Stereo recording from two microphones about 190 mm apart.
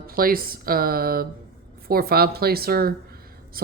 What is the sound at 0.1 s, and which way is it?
Speech, 50° right (ahead or behind).